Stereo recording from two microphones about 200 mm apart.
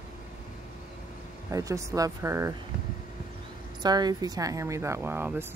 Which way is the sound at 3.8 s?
20° right (ahead or behind).